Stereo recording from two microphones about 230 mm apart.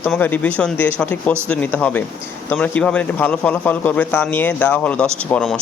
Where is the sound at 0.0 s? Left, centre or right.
Centre.